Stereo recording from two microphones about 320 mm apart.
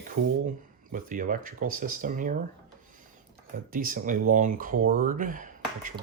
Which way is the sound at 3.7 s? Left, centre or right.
Right.